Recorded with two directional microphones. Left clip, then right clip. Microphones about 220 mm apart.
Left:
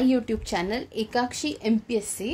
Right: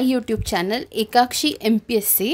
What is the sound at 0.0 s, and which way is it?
A woman's voice, 25° right (ahead or behind).